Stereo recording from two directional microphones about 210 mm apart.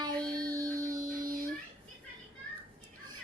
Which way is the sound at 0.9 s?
40° right (ahead or behind).